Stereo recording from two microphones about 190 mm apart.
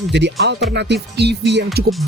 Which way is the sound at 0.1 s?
65° right (ahead or behind).